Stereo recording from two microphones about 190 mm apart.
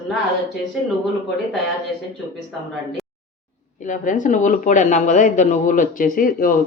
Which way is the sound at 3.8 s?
40° left (ahead or behind).